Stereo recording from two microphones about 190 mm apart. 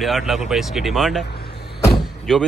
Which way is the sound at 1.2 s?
60° left (ahead or behind).